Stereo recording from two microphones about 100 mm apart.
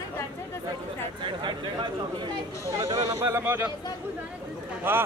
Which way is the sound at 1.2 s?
55° right (ahead or behind).